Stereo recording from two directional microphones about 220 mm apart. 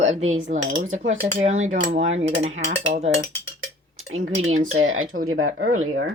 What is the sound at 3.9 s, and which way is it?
Cutlery, 65° right (ahead or behind).